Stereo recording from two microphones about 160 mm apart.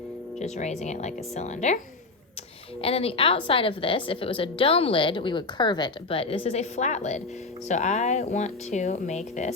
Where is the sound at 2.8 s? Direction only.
35° left (ahead or behind).